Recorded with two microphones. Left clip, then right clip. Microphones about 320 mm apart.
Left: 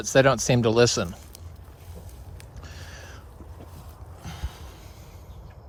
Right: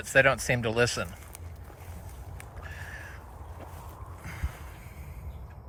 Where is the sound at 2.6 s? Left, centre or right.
Centre.